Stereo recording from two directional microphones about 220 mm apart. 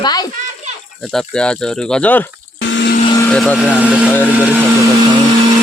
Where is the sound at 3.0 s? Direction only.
15° left (ahead or behind).